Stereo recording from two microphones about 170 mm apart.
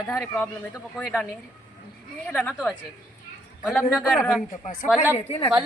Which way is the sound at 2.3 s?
5° left (ahead or behind).